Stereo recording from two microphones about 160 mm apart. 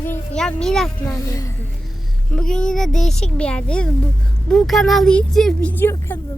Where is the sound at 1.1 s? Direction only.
20° left (ahead or behind).